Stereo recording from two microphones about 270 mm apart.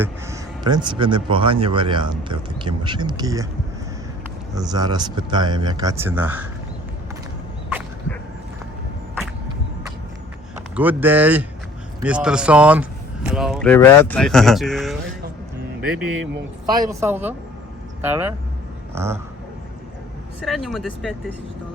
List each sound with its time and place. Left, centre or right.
0.0 s speech: centre
4.5 s speech: centre
10.8 s speech: centre
16.0 s speech: right
16.7 s speech: centre
20.4 s speech: centre